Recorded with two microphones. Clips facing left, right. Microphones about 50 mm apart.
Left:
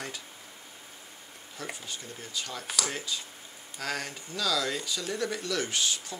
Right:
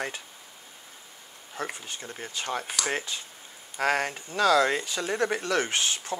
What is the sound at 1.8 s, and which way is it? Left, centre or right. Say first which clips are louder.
Speech: right 3 dB; right.